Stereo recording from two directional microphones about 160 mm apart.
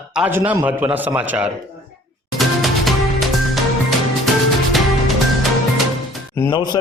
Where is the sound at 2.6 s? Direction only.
Centre (ahead or behind).